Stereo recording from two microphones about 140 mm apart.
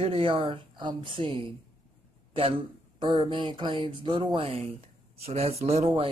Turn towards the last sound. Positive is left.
turn(degrees=-45)  # may be behind; listen again after turning